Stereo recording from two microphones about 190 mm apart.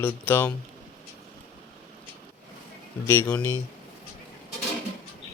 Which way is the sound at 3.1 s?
10° left (ahead or behind).